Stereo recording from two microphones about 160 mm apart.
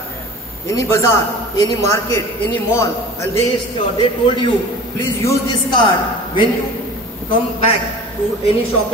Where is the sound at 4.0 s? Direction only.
30° left (ahead or behind).